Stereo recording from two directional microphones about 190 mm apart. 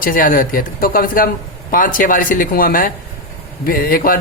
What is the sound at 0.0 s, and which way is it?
Speech, 45° left (ahead or behind).